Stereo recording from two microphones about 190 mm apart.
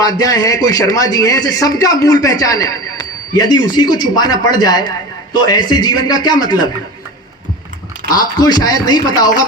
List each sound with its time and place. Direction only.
0.0 s a man's voice: 20° left (ahead or behind)
8.1 s a man's voice: 20° left (ahead or behind)